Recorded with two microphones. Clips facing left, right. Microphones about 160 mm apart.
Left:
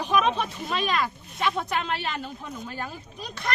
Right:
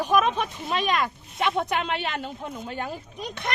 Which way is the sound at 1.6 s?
20° right (ahead or behind).